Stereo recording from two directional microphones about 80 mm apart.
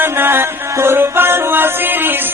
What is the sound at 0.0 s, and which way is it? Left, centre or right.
Music, right.